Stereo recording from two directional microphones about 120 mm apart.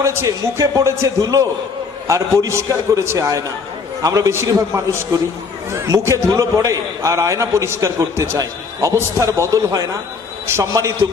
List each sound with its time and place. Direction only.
0.0 s a man's voice: 25° right (ahead or behind)